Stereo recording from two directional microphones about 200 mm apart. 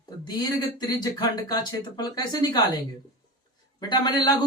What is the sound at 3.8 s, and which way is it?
Speech, 20° left (ahead or behind).